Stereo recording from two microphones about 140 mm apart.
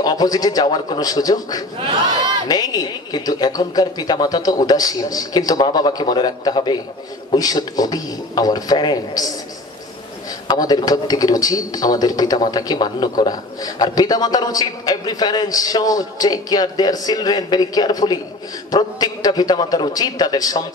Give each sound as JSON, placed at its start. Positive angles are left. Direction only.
{"t": 0.0, "sound": "speech", "side_deg": 25}
{"t": 10.5, "sound": "speech", "side_deg": 25}